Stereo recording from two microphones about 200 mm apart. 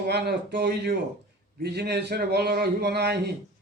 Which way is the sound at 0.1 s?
55° right (ahead or behind).